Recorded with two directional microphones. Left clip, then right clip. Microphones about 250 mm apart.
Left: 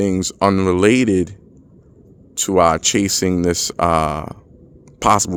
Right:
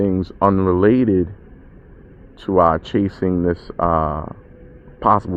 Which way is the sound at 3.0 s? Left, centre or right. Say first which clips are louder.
Left 2 dB; left.